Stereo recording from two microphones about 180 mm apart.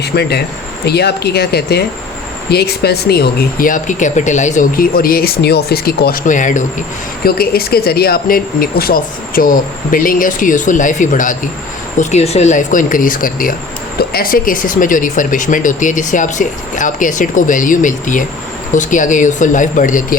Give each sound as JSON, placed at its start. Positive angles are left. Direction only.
{"t": 0.0, "sound": "speech", "side_deg": 65}
{"t": 7.3, "sound": "speech", "side_deg": 55}